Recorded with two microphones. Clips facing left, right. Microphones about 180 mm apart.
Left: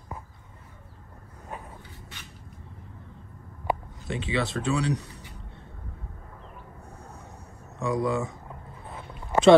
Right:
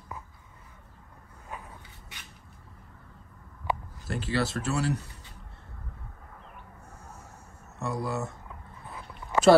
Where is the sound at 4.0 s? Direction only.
Centre (ahead or behind).